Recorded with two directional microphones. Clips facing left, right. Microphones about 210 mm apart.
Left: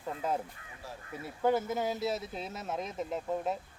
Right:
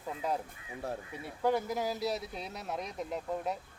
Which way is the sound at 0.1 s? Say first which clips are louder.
Left 1 dB; centre (ahead or behind).